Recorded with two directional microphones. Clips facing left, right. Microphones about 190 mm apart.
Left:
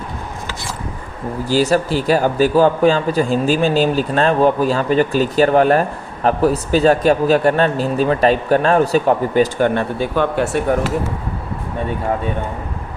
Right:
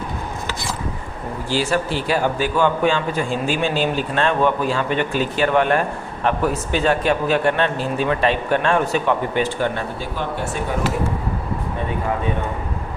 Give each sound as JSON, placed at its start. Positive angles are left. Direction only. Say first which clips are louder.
{"t": 1.5, "sound": "speech", "louder": "left 5 dB", "side_deg": 40}
{"t": 9.7, "sound": "speech", "louder": "left 8 dB", "side_deg": 65}